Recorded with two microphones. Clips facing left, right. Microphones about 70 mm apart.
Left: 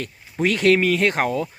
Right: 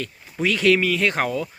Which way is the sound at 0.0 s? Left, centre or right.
Left.